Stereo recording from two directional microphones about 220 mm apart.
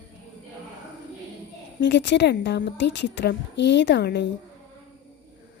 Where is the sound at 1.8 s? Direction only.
55° left (ahead or behind).